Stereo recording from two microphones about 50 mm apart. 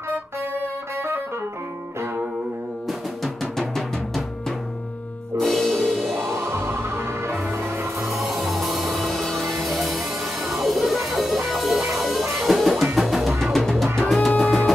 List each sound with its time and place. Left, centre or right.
0.1 s music: right
3.5 s music: centre
6.2 s music: right
8.0 s music: centre
14.3 s music: centre